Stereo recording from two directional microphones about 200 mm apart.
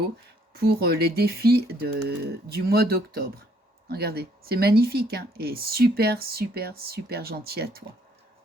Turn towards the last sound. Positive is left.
turn(degrees=-50)  # may be behind; listen again after turning